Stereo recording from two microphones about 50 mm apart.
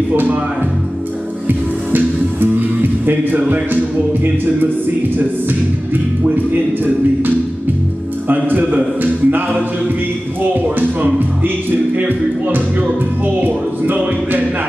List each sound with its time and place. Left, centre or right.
0.1 s a man's voice: right
1.5 s music: right
3.1 s a man's voice: right
6.2 s music: right
8.3 s a man's voice: right
10.5 s a man's voice: right
11.1 s music: right